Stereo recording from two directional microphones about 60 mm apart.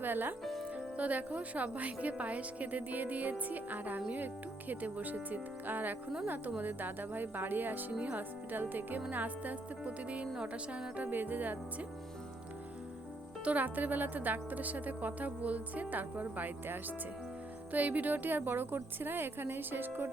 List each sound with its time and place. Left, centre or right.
0.0 s a woman's voice: right
0.4 s speech: centre
0.9 s a woman's voice: right
13.4 s a woman's voice: right